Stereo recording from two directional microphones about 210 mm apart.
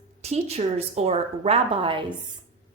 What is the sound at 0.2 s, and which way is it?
A woman's voice, 30° right (ahead or behind).